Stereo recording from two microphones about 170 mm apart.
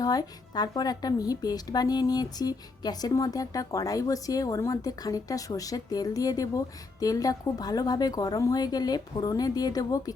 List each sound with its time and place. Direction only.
0.0 s a woman's voice: 20° left (ahead or behind)